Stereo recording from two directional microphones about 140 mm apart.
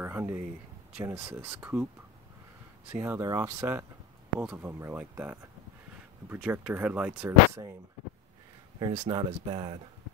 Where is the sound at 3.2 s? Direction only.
25° right (ahead or behind); by 7.3 s 10° right (ahead or behind).